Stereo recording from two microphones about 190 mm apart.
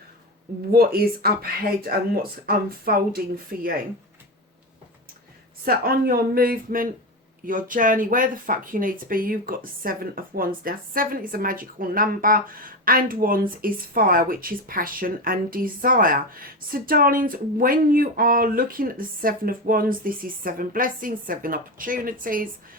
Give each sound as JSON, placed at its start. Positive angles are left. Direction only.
{"t": 0.7, "sound": "speech", "side_deg": -50}
{"t": 5.6, "sound": "speech", "side_deg": -50}